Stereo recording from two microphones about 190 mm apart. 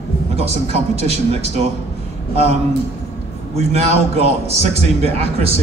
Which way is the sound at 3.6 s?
35° right (ahead or behind).